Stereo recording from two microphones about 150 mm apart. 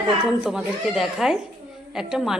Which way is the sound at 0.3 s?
5° right (ahead or behind).